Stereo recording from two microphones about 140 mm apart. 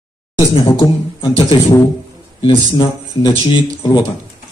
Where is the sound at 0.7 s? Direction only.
35° left (ahead or behind).